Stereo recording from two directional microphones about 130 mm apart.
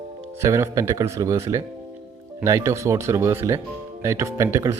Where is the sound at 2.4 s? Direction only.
25° right (ahead or behind).